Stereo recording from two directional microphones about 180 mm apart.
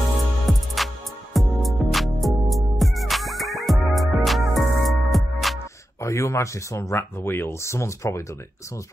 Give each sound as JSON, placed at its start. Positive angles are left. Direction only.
{"t": 0.5, "sound": "music", "side_deg": 0}
{"t": 5.9, "sound": "speech", "side_deg": 15}